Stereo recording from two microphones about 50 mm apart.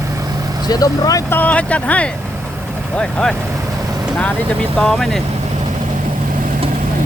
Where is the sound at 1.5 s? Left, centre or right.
Left.